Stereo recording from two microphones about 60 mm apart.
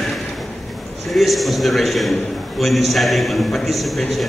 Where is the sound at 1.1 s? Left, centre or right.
Centre.